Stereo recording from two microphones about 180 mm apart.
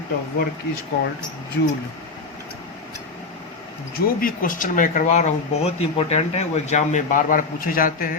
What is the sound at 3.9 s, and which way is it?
Speech, 55° left (ahead or behind).